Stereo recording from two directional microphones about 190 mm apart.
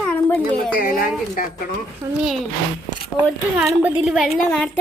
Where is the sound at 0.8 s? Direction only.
45° left (ahead or behind).